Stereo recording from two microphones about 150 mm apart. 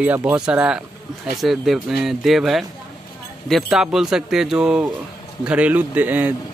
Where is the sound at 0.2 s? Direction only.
10° right (ahead or behind).